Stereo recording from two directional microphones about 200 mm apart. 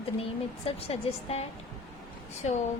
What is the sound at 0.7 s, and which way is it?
Speech, 30° left (ahead or behind).